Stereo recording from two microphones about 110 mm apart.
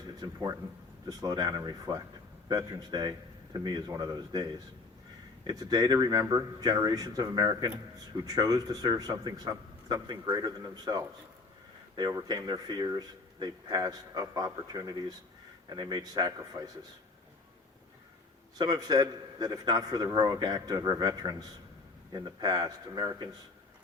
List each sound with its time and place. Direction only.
0.2 s speech: 40° right (ahead or behind)
5.5 s speech: 35° right (ahead or behind)
18.5 s speech: 35° right (ahead or behind)